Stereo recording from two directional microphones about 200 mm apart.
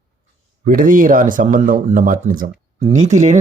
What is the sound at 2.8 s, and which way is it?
Speech, 35° right (ahead or behind).